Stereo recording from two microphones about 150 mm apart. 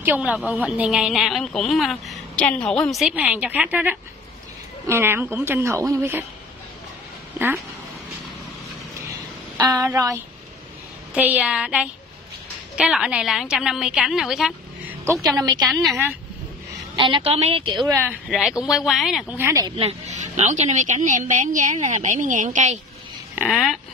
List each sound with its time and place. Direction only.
0.0 s a woman's voice: 10° right (ahead or behind)
7.3 s speech: 15° right (ahead or behind)
9.7 s a woman's voice: 20° right (ahead or behind)
11.1 s a woman's voice: 10° right (ahead or behind)
15.3 s a woman's voice: 30° right (ahead or behind)
15.7 s speech: centre (ahead or behind)
16.9 s a woman's voice: 35° right (ahead or behind)
18.3 s speech: 5° right (ahead or behind)
19.3 s a woman's voice: 20° right (ahead or behind)
19.8 s a woman's voice: 45° right (ahead or behind)
23.3 s speech: 5° right (ahead or behind)